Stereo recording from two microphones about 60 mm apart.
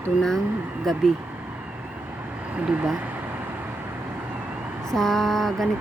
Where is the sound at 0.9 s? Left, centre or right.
Centre.